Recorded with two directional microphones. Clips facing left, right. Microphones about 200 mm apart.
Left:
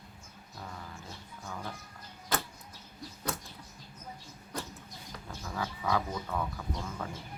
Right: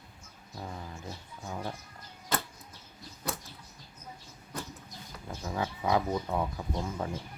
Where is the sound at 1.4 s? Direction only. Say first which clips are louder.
Right 4 dB; 20° right (ahead or behind).